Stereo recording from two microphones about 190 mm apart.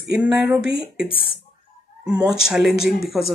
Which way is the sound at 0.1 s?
10° right (ahead or behind).